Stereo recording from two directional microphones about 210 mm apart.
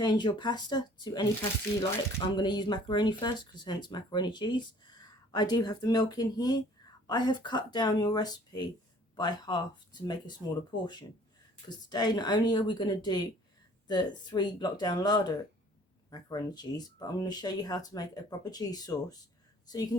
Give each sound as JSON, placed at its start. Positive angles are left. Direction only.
{"t": 0.0, "sound": "speech", "side_deg": 20}
{"t": 2.3, "sound": "speech", "side_deg": 20}